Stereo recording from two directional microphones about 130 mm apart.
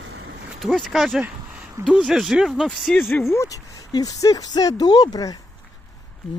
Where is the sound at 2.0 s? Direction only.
Centre (ahead or behind).